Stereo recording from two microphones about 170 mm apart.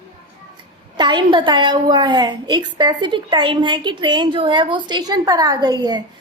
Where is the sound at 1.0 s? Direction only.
25° right (ahead or behind).